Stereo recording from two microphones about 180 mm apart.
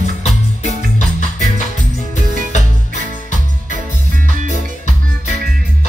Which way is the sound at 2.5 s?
45° left (ahead or behind).